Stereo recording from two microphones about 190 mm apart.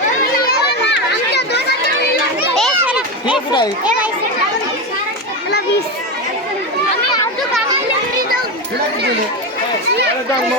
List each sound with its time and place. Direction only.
0.9 s children playing: 60° left (ahead or behind)
2.6 s children playing: centre (ahead or behind)